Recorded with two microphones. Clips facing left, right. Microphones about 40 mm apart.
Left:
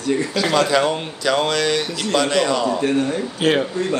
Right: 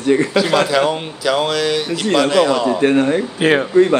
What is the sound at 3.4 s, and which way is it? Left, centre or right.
Speech, right.